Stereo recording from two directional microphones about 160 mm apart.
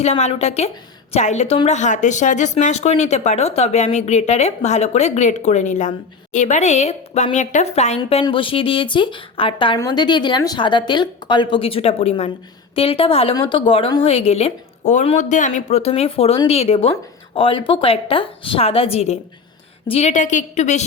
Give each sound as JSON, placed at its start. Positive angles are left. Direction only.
{"t": 0.0, "sound": "a woman's voice", "side_deg": 40}
{"t": 8.2, "sound": "a woman's voice", "side_deg": 35}